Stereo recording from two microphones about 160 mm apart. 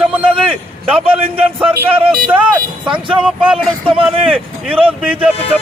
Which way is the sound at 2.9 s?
30° right (ahead or behind).